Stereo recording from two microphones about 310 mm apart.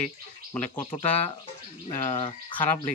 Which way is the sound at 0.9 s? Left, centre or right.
Centre.